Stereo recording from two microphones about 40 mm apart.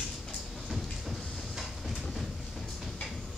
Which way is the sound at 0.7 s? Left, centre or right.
Centre.